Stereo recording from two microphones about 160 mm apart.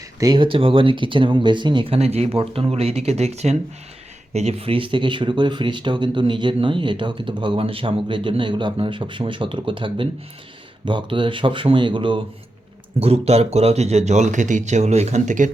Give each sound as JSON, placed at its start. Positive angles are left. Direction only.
{"t": 0.2, "sound": "speech", "side_deg": -25}